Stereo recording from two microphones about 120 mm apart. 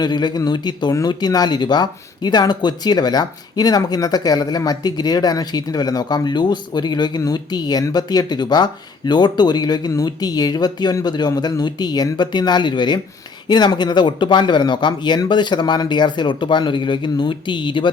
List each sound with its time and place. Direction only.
0.0 s speech: 40° left (ahead or behind)